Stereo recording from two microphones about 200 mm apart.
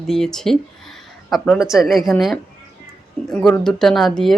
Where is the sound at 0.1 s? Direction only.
Centre (ahead or behind).